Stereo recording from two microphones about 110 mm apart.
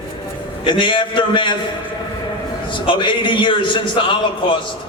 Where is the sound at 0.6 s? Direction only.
50° left (ahead or behind).